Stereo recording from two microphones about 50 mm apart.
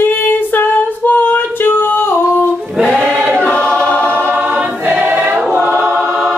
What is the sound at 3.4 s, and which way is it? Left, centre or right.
Choir, centre.